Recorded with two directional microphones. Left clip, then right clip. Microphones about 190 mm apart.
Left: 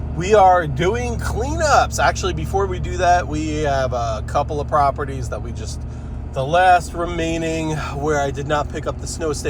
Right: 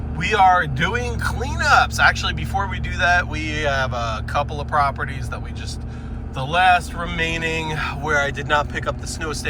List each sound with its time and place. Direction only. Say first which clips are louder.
0.3 s speech: left 3 dB; 50° left (ahead or behind)